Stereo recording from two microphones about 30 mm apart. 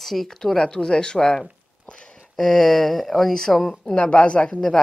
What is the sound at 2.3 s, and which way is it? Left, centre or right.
Speech, centre.